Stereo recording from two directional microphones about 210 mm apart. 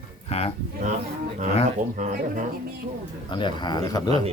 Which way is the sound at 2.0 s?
35° right (ahead or behind).